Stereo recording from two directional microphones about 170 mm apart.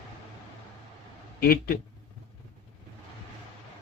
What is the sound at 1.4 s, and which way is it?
Speech, 60° left (ahead or behind).